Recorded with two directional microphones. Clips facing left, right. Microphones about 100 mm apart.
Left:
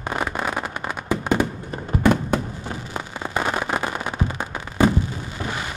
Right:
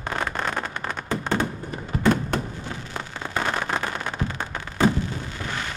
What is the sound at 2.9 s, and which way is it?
Firecracker, 15° left (ahead or behind).